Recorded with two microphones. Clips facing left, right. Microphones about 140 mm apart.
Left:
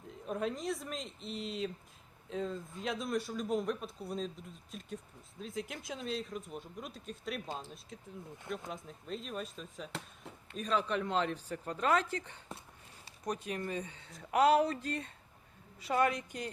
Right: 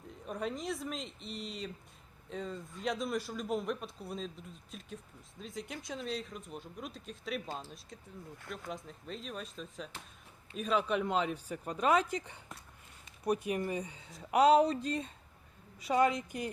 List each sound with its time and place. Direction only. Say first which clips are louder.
0.1 s speech: left 2 dB; centre (ahead or behind)